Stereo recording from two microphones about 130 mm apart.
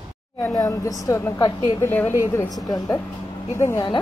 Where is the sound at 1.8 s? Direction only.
10° left (ahead or behind).